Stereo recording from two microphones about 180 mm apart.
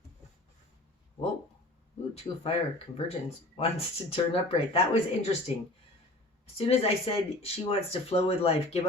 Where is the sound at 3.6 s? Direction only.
30° left (ahead or behind).